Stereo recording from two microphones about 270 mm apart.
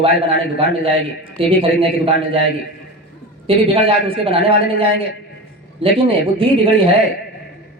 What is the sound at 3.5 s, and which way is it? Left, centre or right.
A man's voice, centre.